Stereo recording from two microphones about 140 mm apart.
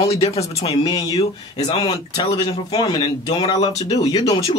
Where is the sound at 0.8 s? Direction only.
25° left (ahead or behind).